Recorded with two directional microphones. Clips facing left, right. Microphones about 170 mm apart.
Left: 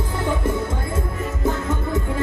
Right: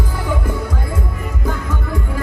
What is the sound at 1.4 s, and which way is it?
Music, 25° left (ahead or behind).